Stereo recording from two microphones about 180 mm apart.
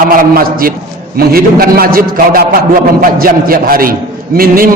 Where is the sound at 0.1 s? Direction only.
55° right (ahead or behind).